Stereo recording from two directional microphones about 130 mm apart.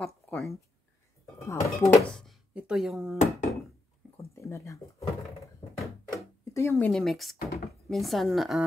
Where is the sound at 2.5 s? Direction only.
5° right (ahead or behind).